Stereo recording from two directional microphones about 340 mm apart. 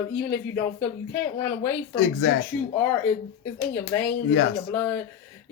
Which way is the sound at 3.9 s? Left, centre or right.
Centre.